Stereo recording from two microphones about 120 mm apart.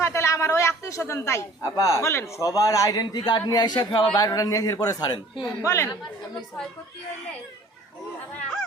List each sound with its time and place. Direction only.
0.0 s a man's voice: 25° left (ahead or behind)